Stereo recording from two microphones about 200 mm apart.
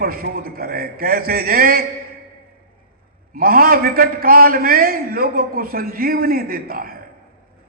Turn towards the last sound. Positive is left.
turn(degrees=-45)  # may be behind; listen again after turning